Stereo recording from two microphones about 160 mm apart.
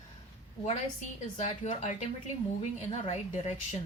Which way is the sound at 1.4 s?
45° left (ahead or behind).